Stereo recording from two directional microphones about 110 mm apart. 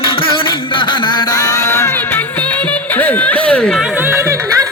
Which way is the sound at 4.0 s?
20° right (ahead or behind).